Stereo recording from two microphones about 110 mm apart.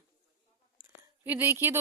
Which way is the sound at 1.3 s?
20° right (ahead or behind).